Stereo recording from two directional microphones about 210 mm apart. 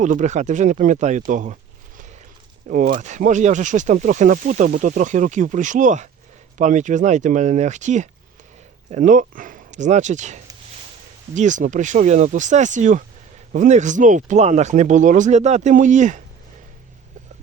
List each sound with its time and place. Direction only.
0.0 s speech: 35° right (ahead or behind)
2.6 s speech: 40° right (ahead or behind)